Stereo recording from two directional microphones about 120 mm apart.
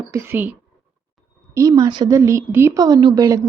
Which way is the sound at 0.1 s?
15° right (ahead or behind).